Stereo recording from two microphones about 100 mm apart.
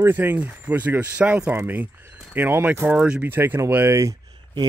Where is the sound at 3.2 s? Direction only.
20° right (ahead or behind).